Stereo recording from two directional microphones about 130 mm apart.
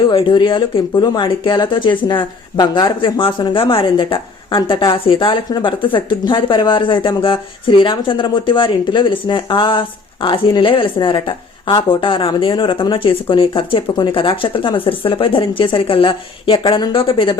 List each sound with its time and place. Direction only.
0.0 s speech: 40° left (ahead or behind)